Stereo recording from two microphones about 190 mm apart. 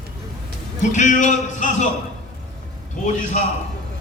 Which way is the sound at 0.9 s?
40° left (ahead or behind).